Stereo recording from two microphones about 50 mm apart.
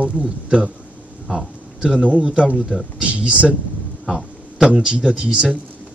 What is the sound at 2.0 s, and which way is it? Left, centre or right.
A man's voice, right.